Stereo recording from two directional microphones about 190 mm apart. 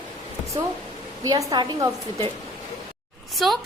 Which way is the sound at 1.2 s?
15° right (ahead or behind).